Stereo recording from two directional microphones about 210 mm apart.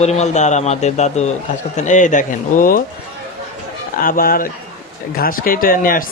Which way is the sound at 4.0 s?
40° left (ahead or behind).